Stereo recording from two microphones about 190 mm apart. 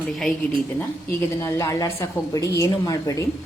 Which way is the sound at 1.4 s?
15° left (ahead or behind).